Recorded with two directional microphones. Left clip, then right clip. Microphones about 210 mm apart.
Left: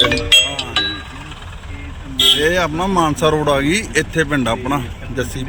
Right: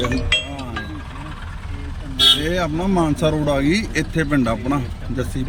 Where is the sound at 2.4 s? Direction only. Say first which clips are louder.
Left 6 dB; 5° right (ahead or behind).